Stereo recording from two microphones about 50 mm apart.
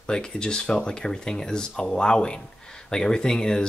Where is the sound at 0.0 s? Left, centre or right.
Centre.